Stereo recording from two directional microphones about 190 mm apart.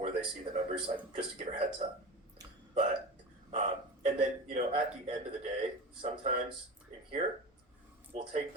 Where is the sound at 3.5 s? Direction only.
40° right (ahead or behind).